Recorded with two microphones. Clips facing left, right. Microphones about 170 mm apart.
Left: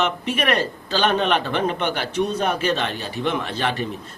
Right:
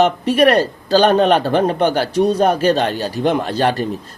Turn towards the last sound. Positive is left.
turn(degrees=-40)  # may be behind; listen again after turning